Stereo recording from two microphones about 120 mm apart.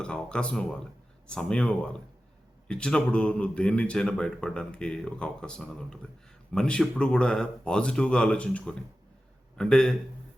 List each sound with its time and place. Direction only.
0.0 s speech: 10° left (ahead or behind)